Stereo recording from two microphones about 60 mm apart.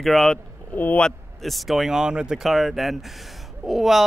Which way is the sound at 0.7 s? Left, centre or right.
Left.